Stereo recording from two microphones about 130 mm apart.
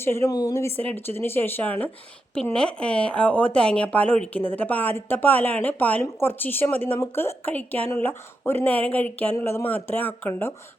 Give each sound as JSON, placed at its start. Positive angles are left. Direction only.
{"t": 0.0, "sound": "a woman's voice", "side_deg": 20}